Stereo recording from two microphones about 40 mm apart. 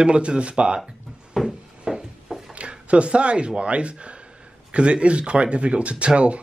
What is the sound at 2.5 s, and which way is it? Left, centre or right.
Speech, right.